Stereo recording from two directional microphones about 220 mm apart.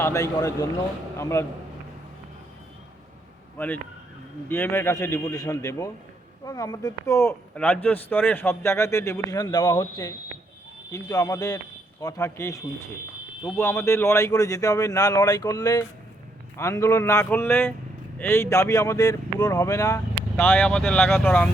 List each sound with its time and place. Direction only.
0.0 s a man's voice: 15° left (ahead or behind)
4.4 s a man's voice: 10° left (ahead or behind)